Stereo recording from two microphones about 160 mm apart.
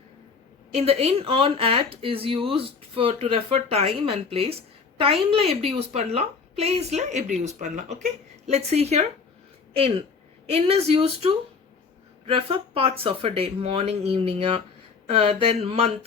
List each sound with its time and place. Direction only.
0.7 s a woman's voice: 40° right (ahead or behind)